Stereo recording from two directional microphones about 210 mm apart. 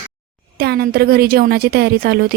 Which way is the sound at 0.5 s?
50° right (ahead or behind).